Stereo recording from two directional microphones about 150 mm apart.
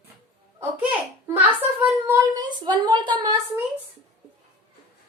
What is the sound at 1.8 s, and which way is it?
Speech, 20° right (ahead or behind).